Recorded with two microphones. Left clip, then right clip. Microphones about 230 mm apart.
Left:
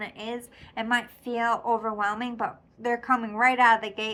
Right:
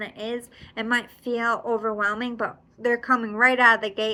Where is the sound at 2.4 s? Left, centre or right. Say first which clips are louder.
Right 3 dB; left.